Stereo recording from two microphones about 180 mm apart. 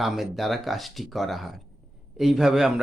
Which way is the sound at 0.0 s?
Centre (ahead or behind).